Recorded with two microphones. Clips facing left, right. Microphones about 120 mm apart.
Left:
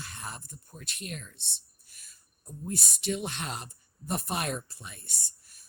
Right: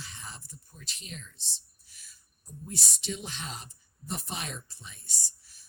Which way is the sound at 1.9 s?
50° left (ahead or behind).